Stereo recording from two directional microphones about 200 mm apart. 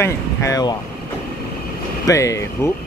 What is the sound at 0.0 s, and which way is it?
Speech, 15° left (ahead or behind).